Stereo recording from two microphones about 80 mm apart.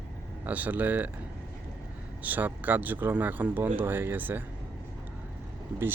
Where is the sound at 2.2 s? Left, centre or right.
Right.